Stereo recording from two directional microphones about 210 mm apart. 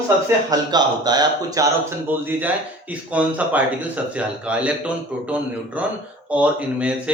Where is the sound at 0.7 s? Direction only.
20° right (ahead or behind).